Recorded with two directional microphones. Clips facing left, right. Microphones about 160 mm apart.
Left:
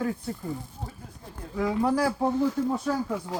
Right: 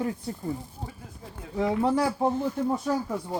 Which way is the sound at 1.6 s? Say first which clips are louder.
Even; 25° right (ahead or behind).